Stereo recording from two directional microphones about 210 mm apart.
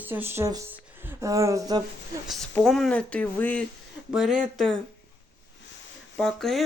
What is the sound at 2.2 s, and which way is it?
Speech, centre (ahead or behind).